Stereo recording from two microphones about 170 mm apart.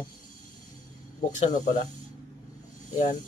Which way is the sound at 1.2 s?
50° left (ahead or behind).